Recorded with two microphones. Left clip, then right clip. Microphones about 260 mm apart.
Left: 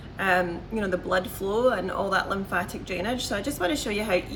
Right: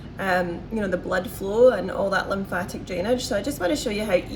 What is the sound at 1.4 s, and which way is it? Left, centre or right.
Speech, left.